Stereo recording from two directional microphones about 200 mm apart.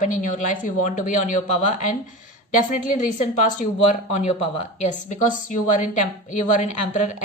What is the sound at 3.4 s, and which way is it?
A woman's voice, 40° left (ahead or behind).